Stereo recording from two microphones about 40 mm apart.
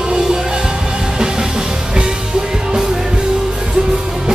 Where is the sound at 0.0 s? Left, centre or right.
Centre.